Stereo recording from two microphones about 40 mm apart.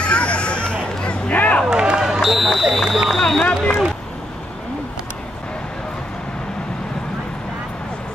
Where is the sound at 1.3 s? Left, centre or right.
Left.